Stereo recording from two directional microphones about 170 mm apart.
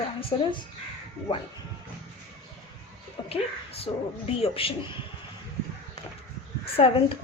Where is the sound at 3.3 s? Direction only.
35° left (ahead or behind).